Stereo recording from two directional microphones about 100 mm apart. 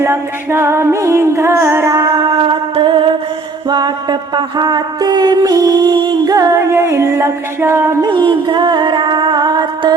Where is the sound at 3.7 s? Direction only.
45° right (ahead or behind).